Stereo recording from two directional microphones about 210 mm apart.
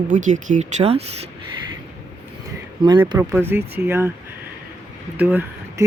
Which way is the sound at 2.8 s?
20° right (ahead or behind).